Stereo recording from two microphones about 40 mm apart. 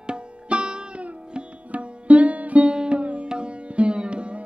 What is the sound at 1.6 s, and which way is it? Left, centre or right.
Music, right.